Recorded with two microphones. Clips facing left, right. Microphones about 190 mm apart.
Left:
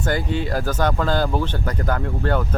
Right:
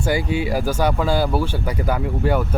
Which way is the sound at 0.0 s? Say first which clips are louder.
Right 2 dB; 10° right (ahead or behind).